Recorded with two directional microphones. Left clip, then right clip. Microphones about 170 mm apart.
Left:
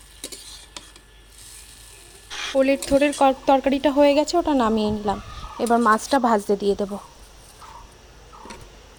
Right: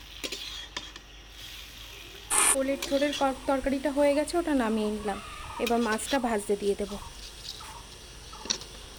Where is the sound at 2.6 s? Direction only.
50° left (ahead or behind).